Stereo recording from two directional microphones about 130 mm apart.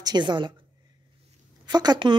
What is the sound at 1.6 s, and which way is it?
Speech, 30° right (ahead or behind).